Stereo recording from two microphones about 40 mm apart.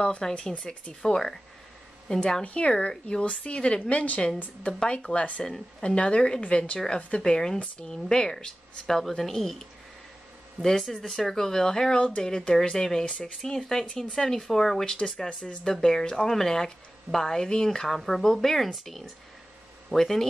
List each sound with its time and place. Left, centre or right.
0.3 s speech: left
1.0 s a woman's voice: centre; by 5.4 s left
5.4 s a woman's voice: centre
7.9 s a woman's voice: centre
13.8 s a woman's voice: left